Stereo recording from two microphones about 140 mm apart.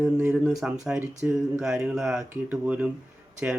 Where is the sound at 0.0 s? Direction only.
10° right (ahead or behind).